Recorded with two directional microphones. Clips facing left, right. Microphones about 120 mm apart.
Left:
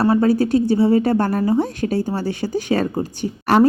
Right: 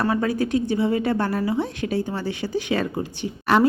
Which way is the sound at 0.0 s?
35° left (ahead or behind).